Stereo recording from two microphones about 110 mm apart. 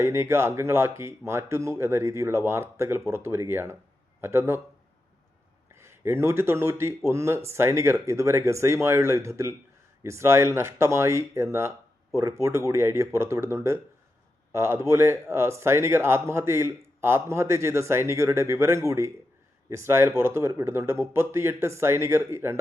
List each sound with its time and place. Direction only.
0.0 s speech: 25° right (ahead or behind)
5.7 s speech: 25° right (ahead or behind)